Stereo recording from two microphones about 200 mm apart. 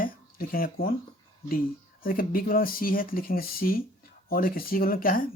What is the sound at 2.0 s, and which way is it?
Speech, 45° left (ahead or behind).